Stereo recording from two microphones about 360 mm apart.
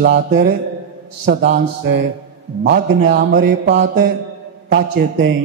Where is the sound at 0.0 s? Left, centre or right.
Right.